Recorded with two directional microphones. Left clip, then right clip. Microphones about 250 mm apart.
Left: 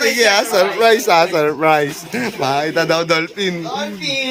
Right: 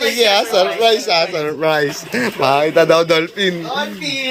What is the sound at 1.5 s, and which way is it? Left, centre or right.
A man's voice, centre.